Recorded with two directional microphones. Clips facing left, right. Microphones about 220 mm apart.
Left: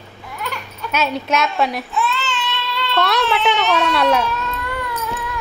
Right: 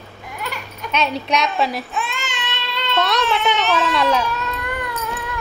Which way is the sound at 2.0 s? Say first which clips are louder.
Left 5 dB; 15° right (ahead or behind).